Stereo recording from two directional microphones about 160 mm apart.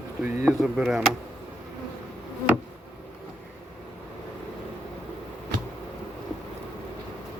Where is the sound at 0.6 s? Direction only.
5° right (ahead or behind).